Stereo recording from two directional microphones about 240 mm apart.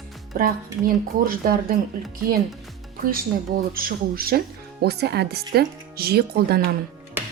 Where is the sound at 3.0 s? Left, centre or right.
Right.